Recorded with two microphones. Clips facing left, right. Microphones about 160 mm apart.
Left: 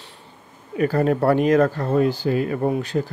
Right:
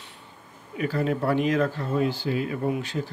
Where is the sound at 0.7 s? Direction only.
45° left (ahead or behind).